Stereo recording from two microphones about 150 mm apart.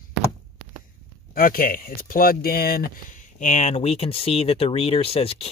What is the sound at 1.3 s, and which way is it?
Speech, 75° left (ahead or behind).